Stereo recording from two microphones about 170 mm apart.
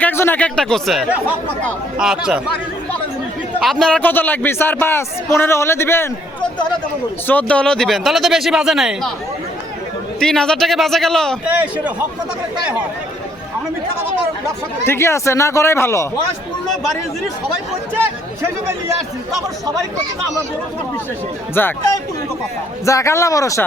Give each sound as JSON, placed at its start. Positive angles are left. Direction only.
{"t": 0.0, "sound": "speech", "side_deg": 10}
{"t": 3.6, "sound": "a man's voice", "side_deg": 0}
{"t": 7.3, "sound": "speech", "side_deg": 10}
{"t": 10.2, "sound": "speech", "side_deg": 5}
{"t": 11.4, "sound": "a man's voice", "side_deg": -10}
{"t": 14.8, "sound": "a man's voice", "side_deg": 15}
{"t": 21.6, "sound": "a man's voice", "side_deg": 10}
{"t": 22.9, "sound": "speech", "side_deg": 15}